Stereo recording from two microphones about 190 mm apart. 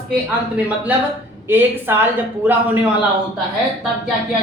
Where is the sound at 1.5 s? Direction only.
10° right (ahead or behind).